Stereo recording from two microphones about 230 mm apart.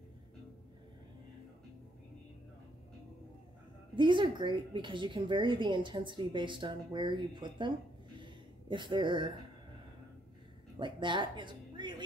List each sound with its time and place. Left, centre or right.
3.9 s a woman's voice: right
8.2 s a sound: right
10.8 s a woman's voice: right